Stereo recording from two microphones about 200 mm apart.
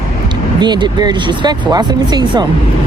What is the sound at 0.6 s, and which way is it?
Speech, 20° right (ahead or behind).